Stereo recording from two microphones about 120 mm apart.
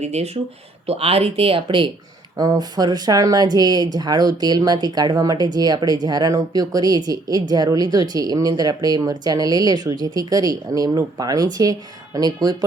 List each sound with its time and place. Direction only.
0.0 s speech: 65° right (ahead or behind)
0.9 s speech: 55° right (ahead or behind)
2.4 s a woman's voice: 35° right (ahead or behind)